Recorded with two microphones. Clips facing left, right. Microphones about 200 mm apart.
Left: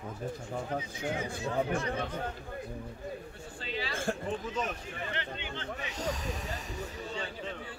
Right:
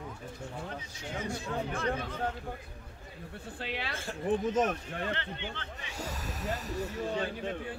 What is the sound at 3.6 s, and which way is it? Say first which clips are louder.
Speech: left 1 dB; 65° right (ahead or behind).